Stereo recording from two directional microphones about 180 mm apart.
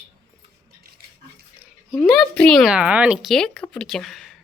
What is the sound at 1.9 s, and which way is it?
Speech, centre (ahead or behind).